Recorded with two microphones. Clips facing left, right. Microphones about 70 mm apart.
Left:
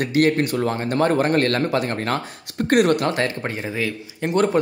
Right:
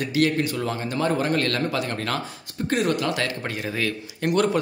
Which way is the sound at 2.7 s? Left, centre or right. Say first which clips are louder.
Left 6 dB; left.